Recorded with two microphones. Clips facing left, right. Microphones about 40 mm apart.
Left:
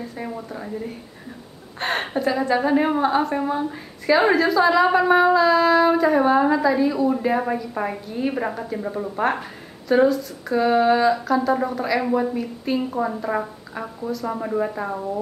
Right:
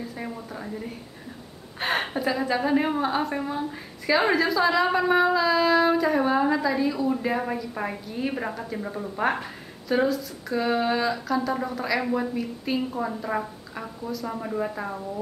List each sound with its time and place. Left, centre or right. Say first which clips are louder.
0.0 s a woman's voice: left 3 dB; centre